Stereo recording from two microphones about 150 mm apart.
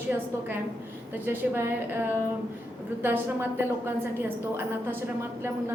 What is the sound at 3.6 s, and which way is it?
A woman's voice, 15° right (ahead or behind).